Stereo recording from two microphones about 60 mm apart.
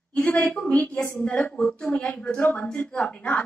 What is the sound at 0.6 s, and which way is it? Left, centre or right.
A woman's voice, left.